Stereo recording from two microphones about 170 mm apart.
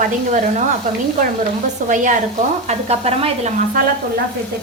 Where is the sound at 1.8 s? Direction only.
50° right (ahead or behind).